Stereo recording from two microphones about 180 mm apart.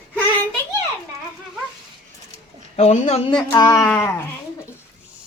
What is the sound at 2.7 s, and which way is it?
Speech, 40° left (ahead or behind).